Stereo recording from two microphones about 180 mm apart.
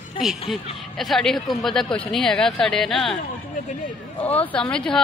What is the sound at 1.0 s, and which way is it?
Speech, centre (ahead or behind).